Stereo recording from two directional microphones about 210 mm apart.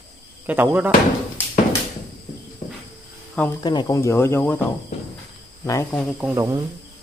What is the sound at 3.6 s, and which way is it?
Speech, 20° left (ahead or behind).